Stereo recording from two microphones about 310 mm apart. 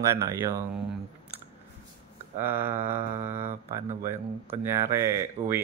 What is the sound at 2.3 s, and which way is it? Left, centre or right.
Speech, centre.